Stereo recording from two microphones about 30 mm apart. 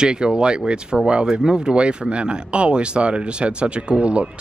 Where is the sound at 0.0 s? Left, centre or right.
Right.